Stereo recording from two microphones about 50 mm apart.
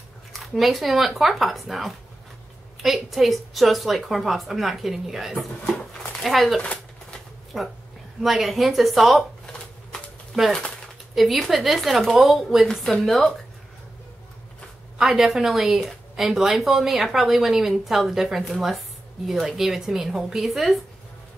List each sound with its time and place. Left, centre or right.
0.3 s a woman's voice: centre
6.6 s shuffling cards: left
7.5 s a woman's voice: centre
10.5 s a sound: centre
11.1 s a woman's voice: centre
15.0 s a woman's voice: centre